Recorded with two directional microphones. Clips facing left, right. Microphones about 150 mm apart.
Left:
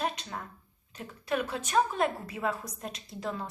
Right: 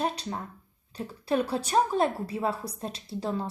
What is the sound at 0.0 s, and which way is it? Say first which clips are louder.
A woman's voice: right 3 dB; 30° right (ahead or behind).